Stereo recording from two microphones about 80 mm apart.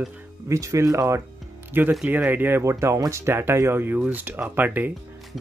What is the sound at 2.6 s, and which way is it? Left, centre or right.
Speech, right.